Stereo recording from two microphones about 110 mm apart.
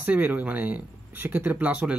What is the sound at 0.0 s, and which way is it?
Speech, 15° right (ahead or behind).